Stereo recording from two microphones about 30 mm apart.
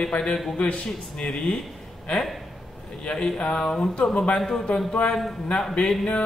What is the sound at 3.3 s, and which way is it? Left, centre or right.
Speech, left.